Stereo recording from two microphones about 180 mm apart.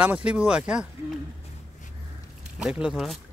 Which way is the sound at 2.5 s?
5° right (ahead or behind).